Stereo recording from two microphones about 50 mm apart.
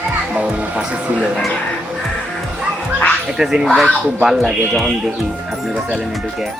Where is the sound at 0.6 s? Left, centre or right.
Right.